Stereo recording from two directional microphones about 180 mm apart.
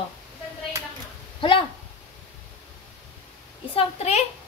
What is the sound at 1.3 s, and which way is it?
Speech, 30° left (ahead or behind).